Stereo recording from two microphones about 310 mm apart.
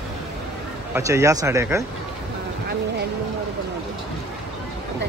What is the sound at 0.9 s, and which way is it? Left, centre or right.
Speech, centre.